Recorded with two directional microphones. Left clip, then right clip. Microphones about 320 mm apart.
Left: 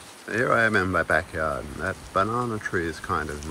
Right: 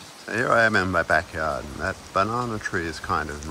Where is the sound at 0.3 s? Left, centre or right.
Centre.